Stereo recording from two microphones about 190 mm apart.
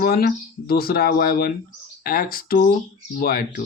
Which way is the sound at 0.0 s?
55° left (ahead or behind).